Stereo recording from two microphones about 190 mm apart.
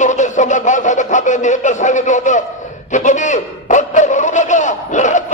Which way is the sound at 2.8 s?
40° left (ahead or behind).